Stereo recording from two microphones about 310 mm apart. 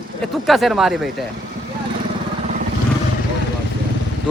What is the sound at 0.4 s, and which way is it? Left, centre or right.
Speech, centre.